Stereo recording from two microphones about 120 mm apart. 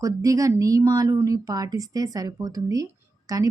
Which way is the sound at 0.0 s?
30° right (ahead or behind).